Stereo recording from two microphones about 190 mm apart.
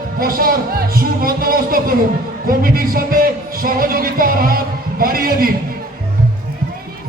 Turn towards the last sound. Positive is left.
turn(degrees=-50)  # may be behind; listen again after turning